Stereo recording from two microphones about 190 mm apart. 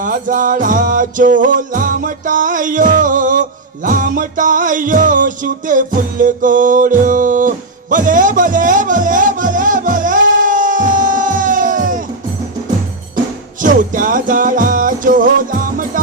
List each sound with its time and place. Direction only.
0.0 s music: 45° right (ahead or behind)
13.6 s music: 45° right (ahead or behind)